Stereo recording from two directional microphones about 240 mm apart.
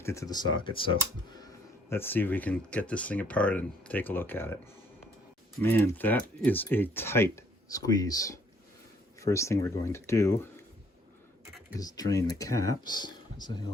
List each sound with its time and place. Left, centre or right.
0.0 s speech: centre
1.9 s speech: centre
5.6 s speech: centre
11.8 s speech: centre